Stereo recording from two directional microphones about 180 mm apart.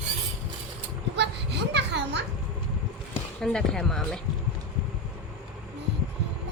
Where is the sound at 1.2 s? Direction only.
70° right (ahead or behind).